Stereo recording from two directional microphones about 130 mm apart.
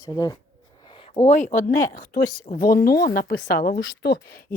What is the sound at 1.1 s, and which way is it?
Speech, 65° left (ahead or behind).